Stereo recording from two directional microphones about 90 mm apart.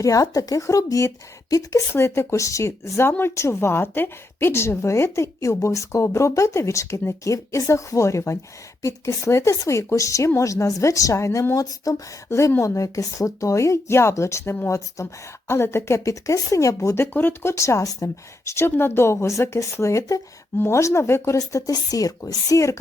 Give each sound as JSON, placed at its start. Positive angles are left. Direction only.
{"t": 0.0, "sound": "speech", "side_deg": 40}
{"t": 21.3, "sound": "speech", "side_deg": 45}